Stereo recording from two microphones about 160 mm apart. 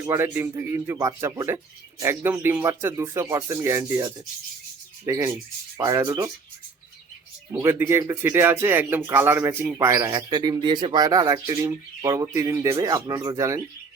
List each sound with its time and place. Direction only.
0.0 s speech: 15° right (ahead or behind)
5.0 s speech: 15° right (ahead or behind)
7.5 s speech: 15° right (ahead or behind)